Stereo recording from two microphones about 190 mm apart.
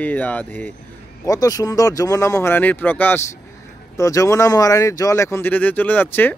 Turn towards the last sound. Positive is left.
turn(degrees=10)  # may be behind; listen again after turning